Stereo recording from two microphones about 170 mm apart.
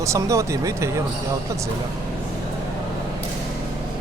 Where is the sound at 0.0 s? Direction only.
20° right (ahead or behind).